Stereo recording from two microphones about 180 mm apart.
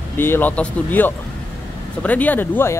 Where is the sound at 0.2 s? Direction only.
10° left (ahead or behind).